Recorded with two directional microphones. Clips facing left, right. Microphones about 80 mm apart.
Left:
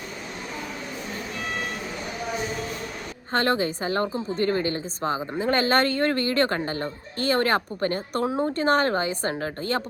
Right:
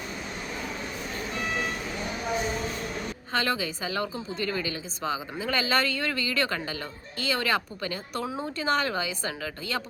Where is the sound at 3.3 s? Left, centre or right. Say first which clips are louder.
Left 6 dB; left.